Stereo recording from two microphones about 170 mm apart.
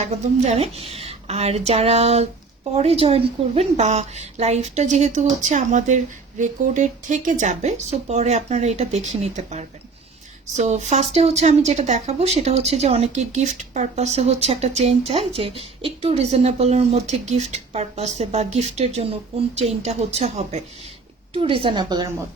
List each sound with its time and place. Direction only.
0.0 s a woman's voice: 40° right (ahead or behind); by 22.1 s 25° right (ahead or behind)